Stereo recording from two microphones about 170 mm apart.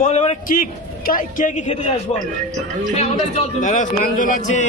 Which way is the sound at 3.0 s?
40° left (ahead or behind).